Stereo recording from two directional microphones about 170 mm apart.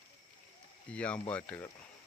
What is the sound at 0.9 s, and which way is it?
Speech, 5° left (ahead or behind).